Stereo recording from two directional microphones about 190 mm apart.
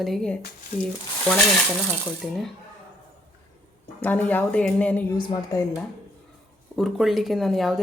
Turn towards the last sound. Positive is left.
turn(degrees=0)  # may be behind; listen again after turning